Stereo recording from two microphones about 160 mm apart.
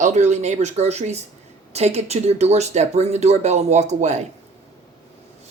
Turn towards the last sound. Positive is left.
turn(degrees=-45)  # may be behind; listen again after turning